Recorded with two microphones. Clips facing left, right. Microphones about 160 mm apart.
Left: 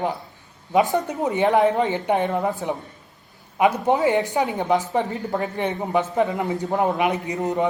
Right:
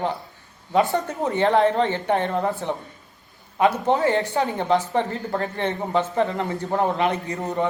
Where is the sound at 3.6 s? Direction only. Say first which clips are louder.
Left 1 dB; 10° left (ahead or behind).